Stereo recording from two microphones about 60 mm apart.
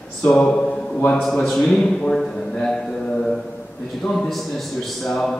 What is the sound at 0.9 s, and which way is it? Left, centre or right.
Speech, left.